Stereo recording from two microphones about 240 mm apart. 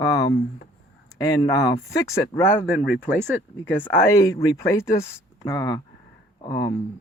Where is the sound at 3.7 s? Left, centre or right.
Centre.